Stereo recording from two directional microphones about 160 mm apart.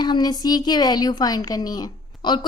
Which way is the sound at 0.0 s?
25° left (ahead or behind).